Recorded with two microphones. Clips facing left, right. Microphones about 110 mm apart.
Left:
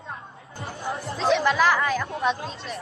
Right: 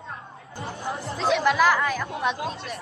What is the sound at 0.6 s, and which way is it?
A woman's voice, centre (ahead or behind).